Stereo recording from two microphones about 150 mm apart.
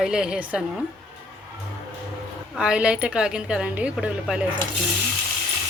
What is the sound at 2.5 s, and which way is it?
Speech, 5° right (ahead or behind).